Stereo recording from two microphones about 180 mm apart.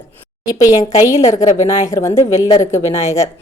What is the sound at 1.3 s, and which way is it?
A woman's voice, 15° left (ahead or behind).